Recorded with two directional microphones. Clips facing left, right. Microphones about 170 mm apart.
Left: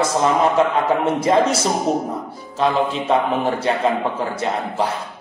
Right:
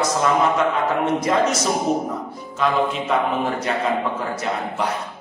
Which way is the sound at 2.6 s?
30° left (ahead or behind).